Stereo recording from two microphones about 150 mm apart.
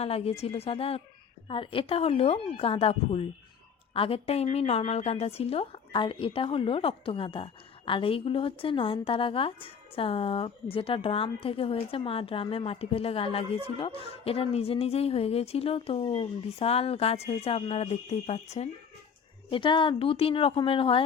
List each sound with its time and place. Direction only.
0.0 s a woman's voice: 40° left (ahead or behind)
19.5 s a woman's voice: 35° left (ahead or behind)